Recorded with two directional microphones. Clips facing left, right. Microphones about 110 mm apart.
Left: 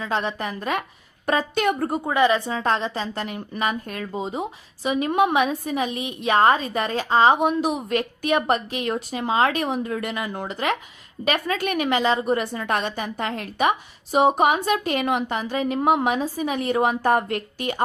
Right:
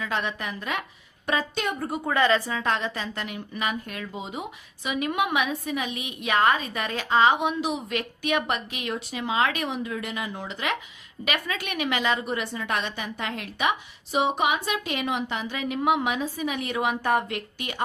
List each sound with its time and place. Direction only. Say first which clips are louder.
0.0 s a woman's voice: left 4 dB; 30° left (ahead or behind)
1.5 s a woman's voice: left 7 dB; 60° left (ahead or behind)
2.0 s speech: left 2 dB; 15° left (ahead or behind)
2.5 s a woman's voice: left 4 dB; 35° left (ahead or behind)